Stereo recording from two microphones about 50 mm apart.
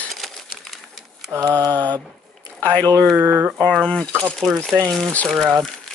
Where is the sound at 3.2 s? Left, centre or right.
Right.